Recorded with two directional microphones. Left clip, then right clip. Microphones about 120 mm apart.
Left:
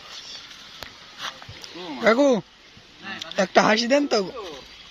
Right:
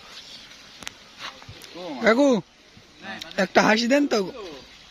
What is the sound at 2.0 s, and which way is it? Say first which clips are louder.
Speech: left 1 dB; 40° right (ahead or behind).